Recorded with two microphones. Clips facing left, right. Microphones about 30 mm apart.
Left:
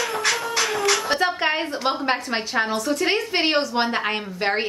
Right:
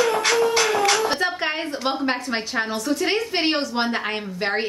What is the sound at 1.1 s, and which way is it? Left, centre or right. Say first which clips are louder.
A woman's voice: left 2 dB; centre.